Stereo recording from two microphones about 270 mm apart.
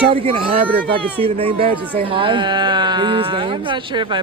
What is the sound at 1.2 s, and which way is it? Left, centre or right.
Speech, right.